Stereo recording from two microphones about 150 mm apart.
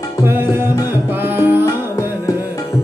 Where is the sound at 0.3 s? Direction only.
15° right (ahead or behind).